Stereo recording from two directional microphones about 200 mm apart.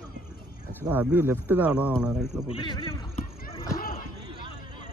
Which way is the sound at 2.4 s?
25° left (ahead or behind).